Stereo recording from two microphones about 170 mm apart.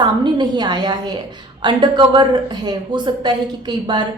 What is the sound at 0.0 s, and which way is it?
A woman's voice, 25° right (ahead or behind).